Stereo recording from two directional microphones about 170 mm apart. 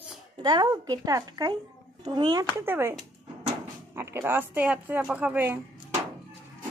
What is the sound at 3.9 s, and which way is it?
Speech, 15° right (ahead or behind).